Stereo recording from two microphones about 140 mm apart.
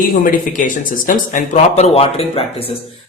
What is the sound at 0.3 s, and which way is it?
Speech, 70° left (ahead or behind).